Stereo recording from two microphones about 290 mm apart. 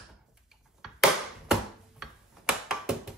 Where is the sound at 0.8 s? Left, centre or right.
Centre.